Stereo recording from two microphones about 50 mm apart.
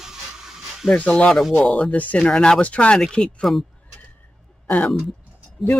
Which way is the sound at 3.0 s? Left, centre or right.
Centre.